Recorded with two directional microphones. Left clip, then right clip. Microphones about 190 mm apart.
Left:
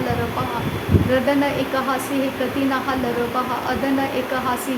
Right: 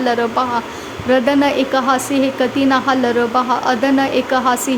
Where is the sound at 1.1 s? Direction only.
35° right (ahead or behind).